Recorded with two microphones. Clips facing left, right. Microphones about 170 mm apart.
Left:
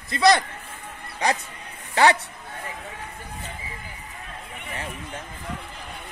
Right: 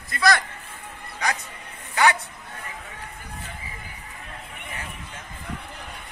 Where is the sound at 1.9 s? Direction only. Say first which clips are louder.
Left 2 dB; 30° left (ahead or behind).